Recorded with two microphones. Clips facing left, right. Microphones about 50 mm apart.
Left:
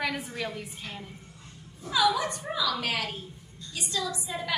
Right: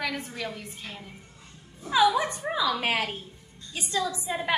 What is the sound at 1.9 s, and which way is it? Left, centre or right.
A woman's voice, right.